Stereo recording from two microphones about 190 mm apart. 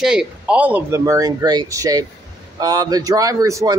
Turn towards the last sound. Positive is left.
turn(degrees=-15)  # may be behind; listen again after turning